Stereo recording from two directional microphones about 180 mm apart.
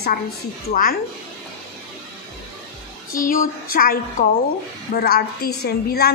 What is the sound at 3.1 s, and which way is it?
A woman's voice, 50° left (ahead or behind).